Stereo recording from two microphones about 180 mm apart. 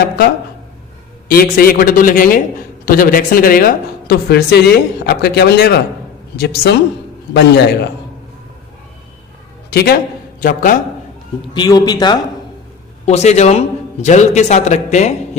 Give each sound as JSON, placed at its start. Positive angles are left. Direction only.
{"t": 1.3, "sound": "a woman's voice", "side_deg": 55}
{"t": 9.6, "sound": "a man's voice", "side_deg": 60}
{"t": 11.5, "sound": "a man's voice", "side_deg": 25}
{"t": 13.1, "sound": "a man's voice", "side_deg": 40}